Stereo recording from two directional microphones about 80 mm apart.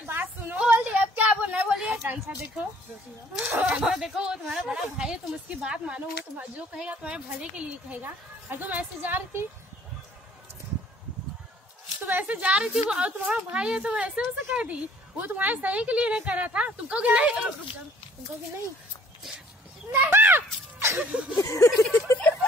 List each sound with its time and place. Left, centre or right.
0.0 s a sound: right
3.7 s a woman's voice: centre
8.0 s a woman's voice: right
12.0 s a woman's voice: right
19.9 s speech: right
21.0 s a woman's voice: centre
21.4 s a sound: left
21.9 s speech: left